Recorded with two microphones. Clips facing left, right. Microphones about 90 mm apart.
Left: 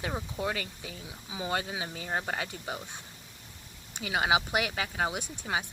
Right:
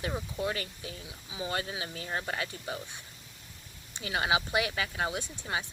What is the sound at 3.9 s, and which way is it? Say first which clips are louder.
Speech: left 2 dB; 20° left (ahead or behind).